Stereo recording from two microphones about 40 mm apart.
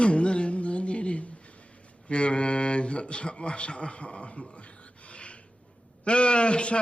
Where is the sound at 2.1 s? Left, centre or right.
Left.